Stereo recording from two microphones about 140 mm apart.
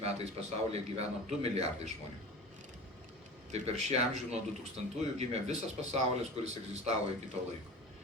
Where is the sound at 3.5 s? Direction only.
50° right (ahead or behind).